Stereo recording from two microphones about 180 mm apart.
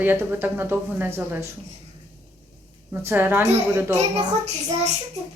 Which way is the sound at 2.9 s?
10° right (ahead or behind).